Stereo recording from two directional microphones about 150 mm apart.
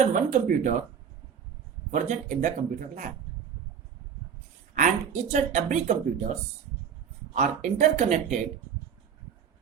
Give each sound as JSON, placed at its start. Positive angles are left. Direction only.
{"t": 0.0, "sound": "speech", "side_deg": -55}
{"t": 1.9, "sound": "speech", "side_deg": -55}
{"t": 4.7, "sound": "speech", "side_deg": -55}
{"t": 7.3, "sound": "speech", "side_deg": -50}